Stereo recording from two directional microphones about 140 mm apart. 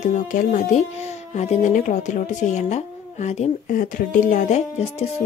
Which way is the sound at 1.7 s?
65° left (ahead or behind).